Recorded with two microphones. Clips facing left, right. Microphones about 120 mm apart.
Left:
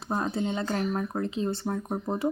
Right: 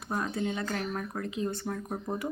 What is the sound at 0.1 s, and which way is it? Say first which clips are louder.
Speech: left 3 dB; 30° left (ahead or behind).